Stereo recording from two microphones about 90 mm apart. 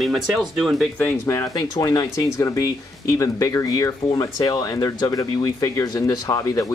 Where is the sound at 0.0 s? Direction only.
Centre (ahead or behind).